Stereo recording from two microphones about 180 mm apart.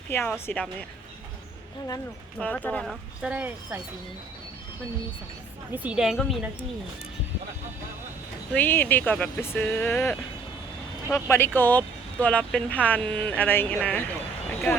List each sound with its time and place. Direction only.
0.1 s speech: 10° left (ahead or behind)
2.4 s speech: 10° left (ahead or behind); by 3.8 s 10° right (ahead or behind)
5.7 s speech: 5° right (ahead or behind)
8.5 s speech: 10° left (ahead or behind)